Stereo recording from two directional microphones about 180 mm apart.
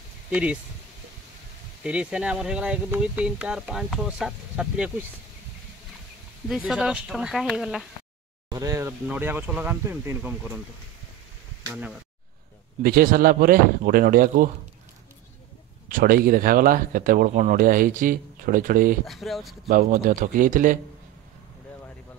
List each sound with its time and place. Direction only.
0.3 s speech: 5° right (ahead or behind)
1.8 s speech: 5° right (ahead or behind)
6.5 s speech: 5° right (ahead or behind)
8.5 s speech: 15° right (ahead or behind)
12.8 s speech: 55° right (ahead or behind)
15.9 s speech: 55° right (ahead or behind)
19.0 s speech: centre (ahead or behind)
19.7 s speech: 50° right (ahead or behind)